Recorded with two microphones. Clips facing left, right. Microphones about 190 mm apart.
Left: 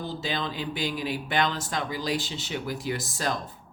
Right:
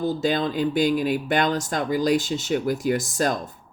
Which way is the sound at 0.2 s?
45° right (ahead or behind).